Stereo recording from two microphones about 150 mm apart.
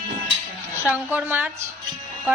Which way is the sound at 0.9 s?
10° right (ahead or behind).